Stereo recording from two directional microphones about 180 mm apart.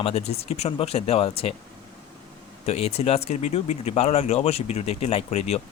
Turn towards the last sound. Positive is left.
turn(degrees=35)  # may be behind; listen again after turning